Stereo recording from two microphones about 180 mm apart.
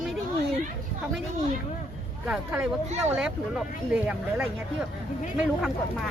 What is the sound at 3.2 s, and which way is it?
Speech, 5° right (ahead or behind).